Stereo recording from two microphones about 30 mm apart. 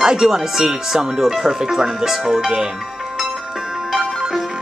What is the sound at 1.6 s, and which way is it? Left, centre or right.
Speech, right.